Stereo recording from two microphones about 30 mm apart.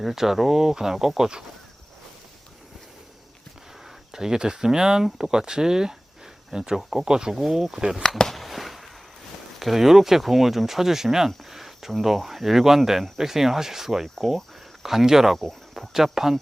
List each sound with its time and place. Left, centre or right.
0.0 s speech: centre
3.8 s speech: centre
7.3 s speech: centre
7.7 s speech: right
8.3 s a sound: centre
9.6 s speech: centre